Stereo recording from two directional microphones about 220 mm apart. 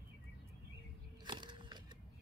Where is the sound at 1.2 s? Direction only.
20° right (ahead or behind).